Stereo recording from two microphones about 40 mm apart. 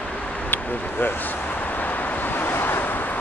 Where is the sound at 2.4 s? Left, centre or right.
Left.